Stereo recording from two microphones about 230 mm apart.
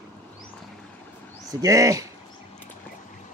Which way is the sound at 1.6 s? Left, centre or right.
Centre.